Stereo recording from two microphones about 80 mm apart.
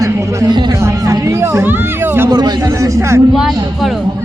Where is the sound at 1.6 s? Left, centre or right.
Right.